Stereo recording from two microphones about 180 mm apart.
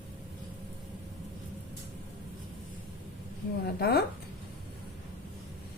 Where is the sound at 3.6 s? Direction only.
60° left (ahead or behind).